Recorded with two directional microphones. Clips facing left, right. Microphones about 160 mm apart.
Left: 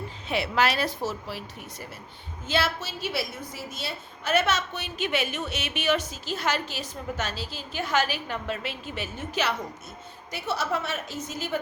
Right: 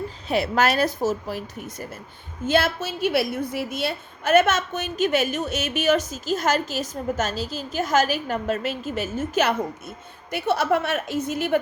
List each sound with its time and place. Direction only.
0.3 s a woman's voice: 40° right (ahead or behind); by 11.6 s 60° right (ahead or behind)